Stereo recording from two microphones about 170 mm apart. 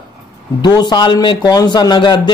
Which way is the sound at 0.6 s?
25° left (ahead or behind).